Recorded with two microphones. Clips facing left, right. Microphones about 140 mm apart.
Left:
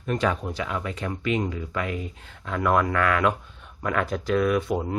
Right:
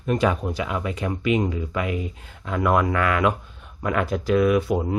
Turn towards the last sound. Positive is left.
turn(degrees=-5)  # may be behind; listen again after turning